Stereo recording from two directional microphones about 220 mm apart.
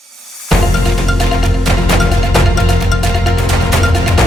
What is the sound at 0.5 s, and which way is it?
Music, centre (ahead or behind).